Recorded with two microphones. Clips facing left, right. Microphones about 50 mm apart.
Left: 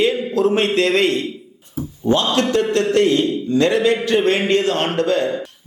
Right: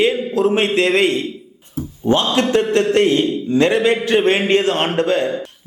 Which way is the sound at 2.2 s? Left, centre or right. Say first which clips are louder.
Right 1 dB; centre.